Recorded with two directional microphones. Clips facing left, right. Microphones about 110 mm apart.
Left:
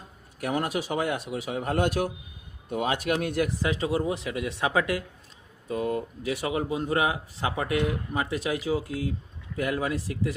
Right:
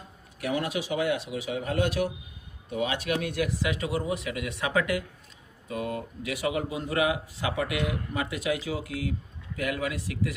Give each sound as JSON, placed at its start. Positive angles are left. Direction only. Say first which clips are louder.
{"t": 0.3, "sound": "speech", "louder": "left 1 dB", "side_deg": 45}
{"t": 3.7, "sound": "a man's voice", "louder": "left 2 dB", "side_deg": 30}